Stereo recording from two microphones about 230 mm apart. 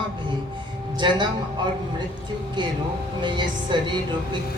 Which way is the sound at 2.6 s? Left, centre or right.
Centre.